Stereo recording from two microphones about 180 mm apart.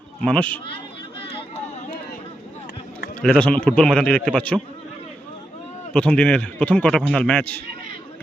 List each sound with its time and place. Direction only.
0.2 s speech: 5° left (ahead or behind)
1.4 s a sound: 35° left (ahead or behind)
3.2 s a man's voice: 5° left (ahead or behind)
5.9 s a man's voice: 5° left (ahead or behind)